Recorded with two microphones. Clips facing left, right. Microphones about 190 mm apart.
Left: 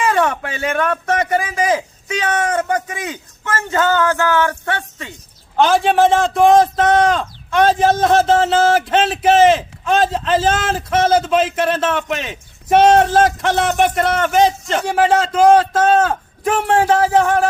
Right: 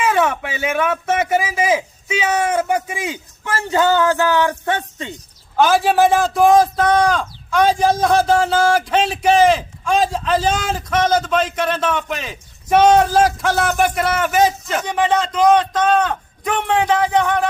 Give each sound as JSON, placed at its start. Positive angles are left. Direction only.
{"t": 0.0, "sound": "a man's voice", "side_deg": -5}
{"t": 5.5, "sound": "a man's voice", "side_deg": -5}
{"t": 6.6, "sound": "a sound", "side_deg": 25}
{"t": 6.9, "sound": "a man's voice", "side_deg": 0}
{"t": 8.2, "sound": "a sound", "side_deg": 25}
{"t": 8.8, "sound": "a man's voice", "side_deg": 0}
{"t": 14.8, "sound": "a man's voice", "side_deg": 5}